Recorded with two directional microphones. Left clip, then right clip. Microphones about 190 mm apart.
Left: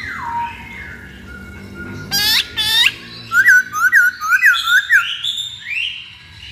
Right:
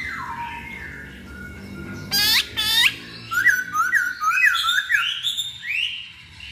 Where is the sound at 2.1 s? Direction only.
10° left (ahead or behind).